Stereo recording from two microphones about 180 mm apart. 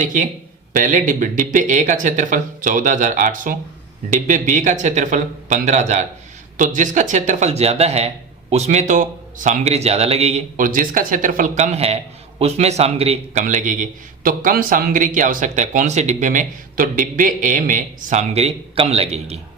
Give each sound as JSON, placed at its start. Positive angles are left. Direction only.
{"t": 0.0, "sound": "speech", "side_deg": -45}
{"t": 13.4, "sound": "speech", "side_deg": -45}